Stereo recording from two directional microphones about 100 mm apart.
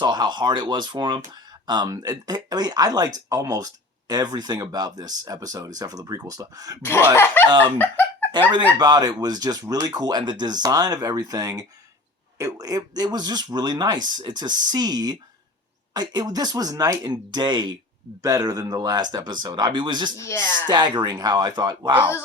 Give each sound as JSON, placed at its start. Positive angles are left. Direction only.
{"t": 0.0, "sound": "speech", "side_deg": -45}
{"t": 6.8, "sound": "speech", "side_deg": 25}
{"t": 7.8, "sound": "chicken", "side_deg": 20}
{"t": 8.8, "sound": "speech", "side_deg": -45}
{"t": 20.1, "sound": "speech", "side_deg": 30}
{"t": 20.7, "sound": "speech", "side_deg": -45}